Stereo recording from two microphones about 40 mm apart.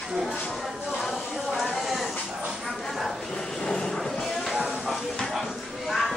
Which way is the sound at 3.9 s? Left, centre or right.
Centre.